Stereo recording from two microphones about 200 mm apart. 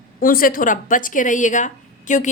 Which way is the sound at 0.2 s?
45° left (ahead or behind).